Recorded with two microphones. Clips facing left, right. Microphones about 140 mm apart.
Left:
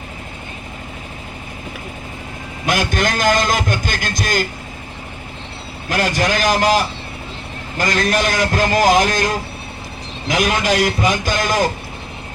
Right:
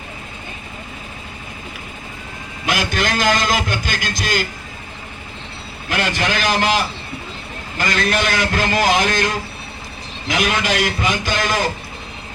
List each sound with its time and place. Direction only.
2.6 s a man's voice: 45° left (ahead or behind)
5.9 s a man's voice: 40° left (ahead or behind)